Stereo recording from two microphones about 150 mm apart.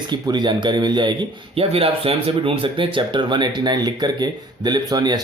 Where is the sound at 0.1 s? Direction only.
30° right (ahead or behind).